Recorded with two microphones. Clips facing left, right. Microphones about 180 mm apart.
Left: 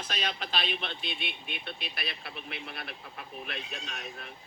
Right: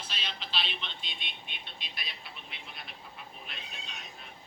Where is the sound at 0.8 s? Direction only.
60° left (ahead or behind).